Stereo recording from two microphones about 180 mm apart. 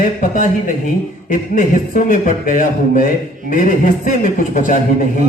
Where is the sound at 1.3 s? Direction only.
50° left (ahead or behind).